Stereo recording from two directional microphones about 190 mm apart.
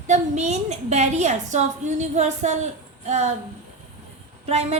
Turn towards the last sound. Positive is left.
turn(degrees=-35)  # may be behind; listen again after turning